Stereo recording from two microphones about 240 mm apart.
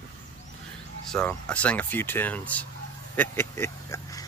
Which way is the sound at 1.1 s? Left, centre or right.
Centre.